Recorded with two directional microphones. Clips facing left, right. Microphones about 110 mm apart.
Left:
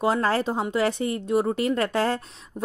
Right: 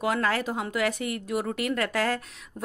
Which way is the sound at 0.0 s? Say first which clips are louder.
Left 4 dB; 30° left (ahead or behind).